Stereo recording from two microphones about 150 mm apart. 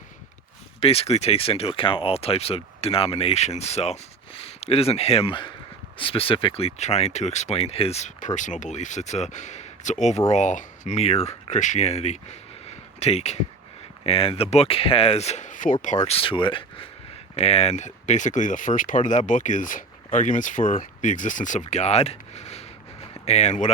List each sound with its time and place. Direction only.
0.8 s speech: 40° left (ahead or behind)